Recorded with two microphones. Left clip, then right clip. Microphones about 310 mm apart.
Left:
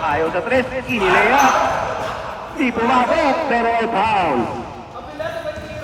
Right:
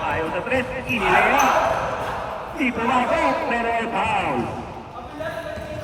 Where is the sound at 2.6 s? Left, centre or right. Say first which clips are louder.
Left 5 dB; left.